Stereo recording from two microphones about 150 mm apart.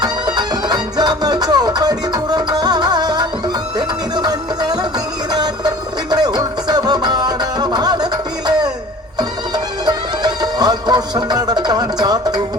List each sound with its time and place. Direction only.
0.0 s music: 25° right (ahead or behind)
9.8 s music: 25° right (ahead or behind)